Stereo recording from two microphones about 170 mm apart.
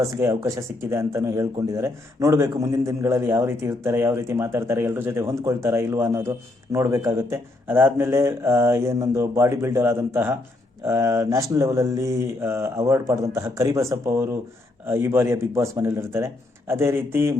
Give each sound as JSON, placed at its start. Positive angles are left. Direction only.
{"t": 0.1, "sound": "speech", "side_deg": -15}